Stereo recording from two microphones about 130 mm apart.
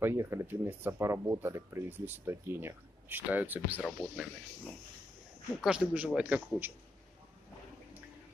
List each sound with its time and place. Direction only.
0.0 s speech: 20° right (ahead or behind)
5.6 s speech: 5° right (ahead or behind)